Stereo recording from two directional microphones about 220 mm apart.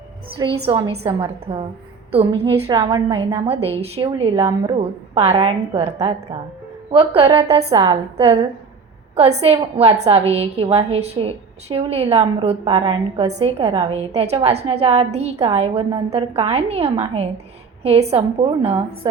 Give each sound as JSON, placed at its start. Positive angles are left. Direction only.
{"t": 0.7, "sound": "a woman's voice", "side_deg": -20}
{"t": 9.4, "sound": "a woman's voice", "side_deg": -25}